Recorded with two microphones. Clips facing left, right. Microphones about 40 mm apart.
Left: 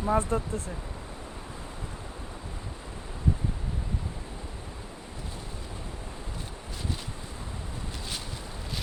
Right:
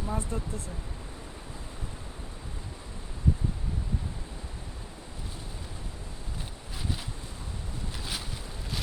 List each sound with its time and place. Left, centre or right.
0.0 s speech: left